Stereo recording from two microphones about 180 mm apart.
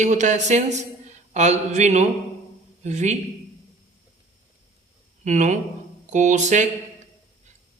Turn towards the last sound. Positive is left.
turn(degrees=-40)  # may be behind; listen again after turning